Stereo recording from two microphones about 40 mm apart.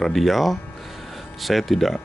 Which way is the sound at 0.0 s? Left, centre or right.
Centre.